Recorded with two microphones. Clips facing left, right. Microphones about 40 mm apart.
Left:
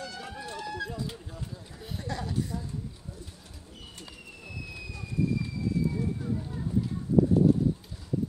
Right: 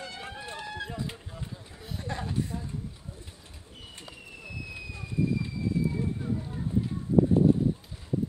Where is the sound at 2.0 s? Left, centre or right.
Right.